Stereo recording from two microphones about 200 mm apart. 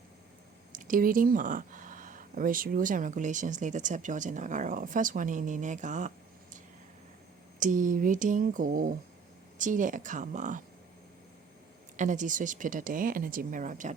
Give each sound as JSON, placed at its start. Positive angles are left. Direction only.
{"t": 0.7, "sound": "speech", "side_deg": -40}
{"t": 7.6, "sound": "speech", "side_deg": -40}
{"t": 11.9, "sound": "speech", "side_deg": -40}